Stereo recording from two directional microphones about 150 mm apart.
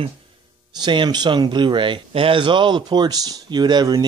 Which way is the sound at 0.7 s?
30° right (ahead or behind).